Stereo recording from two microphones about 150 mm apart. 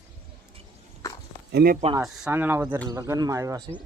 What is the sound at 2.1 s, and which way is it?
Speech, 10° right (ahead or behind).